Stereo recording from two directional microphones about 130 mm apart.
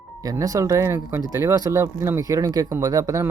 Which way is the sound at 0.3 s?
25° right (ahead or behind).